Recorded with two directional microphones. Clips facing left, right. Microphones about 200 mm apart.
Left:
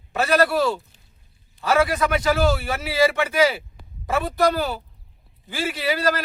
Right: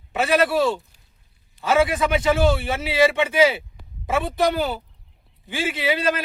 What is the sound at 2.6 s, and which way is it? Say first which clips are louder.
Speech: right 1 dB; 25° right (ahead or behind).